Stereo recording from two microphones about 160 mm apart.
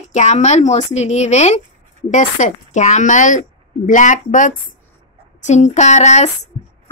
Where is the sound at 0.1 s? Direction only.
45° left (ahead or behind).